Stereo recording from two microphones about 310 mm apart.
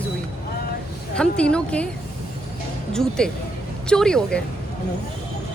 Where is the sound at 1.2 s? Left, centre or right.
Centre.